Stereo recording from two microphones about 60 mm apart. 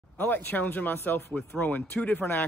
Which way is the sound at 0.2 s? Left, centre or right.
Left.